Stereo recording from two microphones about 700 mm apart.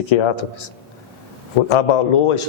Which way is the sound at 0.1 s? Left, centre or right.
Left.